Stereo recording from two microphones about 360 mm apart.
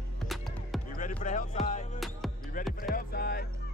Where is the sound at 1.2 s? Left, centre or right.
Left.